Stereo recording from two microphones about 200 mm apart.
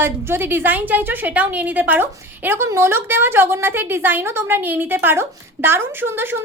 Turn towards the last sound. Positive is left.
turn(degrees=-10)  # may be behind; listen again after turning